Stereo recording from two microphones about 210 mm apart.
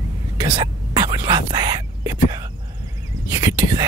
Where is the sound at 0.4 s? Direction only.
20° right (ahead or behind).